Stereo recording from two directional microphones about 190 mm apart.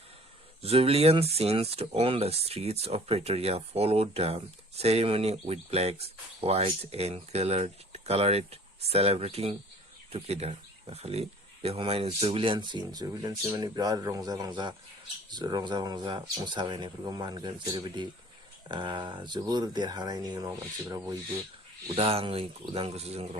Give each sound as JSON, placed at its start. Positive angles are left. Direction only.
{"t": 0.6, "sound": "speech", "side_deg": -30}
{"t": 21.8, "sound": "speech", "side_deg": -30}